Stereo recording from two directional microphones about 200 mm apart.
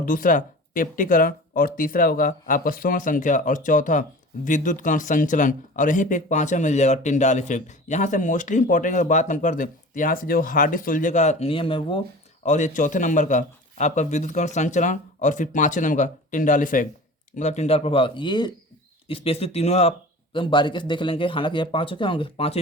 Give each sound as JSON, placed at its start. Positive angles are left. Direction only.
{"t": 0.0, "sound": "speech", "side_deg": 45}
{"t": 12.5, "sound": "speech", "side_deg": 35}